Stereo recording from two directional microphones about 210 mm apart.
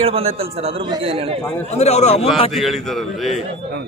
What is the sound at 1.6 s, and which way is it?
Speech, 30° left (ahead or behind).